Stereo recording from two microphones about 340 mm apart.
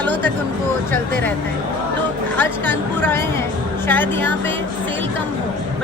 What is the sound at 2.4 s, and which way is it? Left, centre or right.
Speech, centre.